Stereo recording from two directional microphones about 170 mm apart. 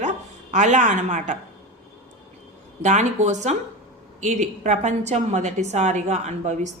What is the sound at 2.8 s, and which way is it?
A woman's voice, 45° right (ahead or behind).